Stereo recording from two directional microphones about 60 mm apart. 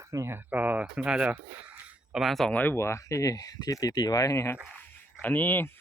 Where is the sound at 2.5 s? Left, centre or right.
Left.